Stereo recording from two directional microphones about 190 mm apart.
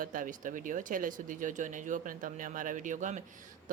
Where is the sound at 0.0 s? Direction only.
45° right (ahead or behind).